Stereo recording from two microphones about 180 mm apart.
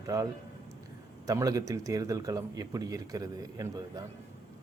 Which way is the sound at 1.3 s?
20° right (ahead or behind).